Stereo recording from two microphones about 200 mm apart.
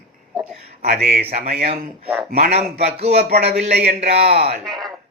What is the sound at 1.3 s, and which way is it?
Speech, 35° right (ahead or behind).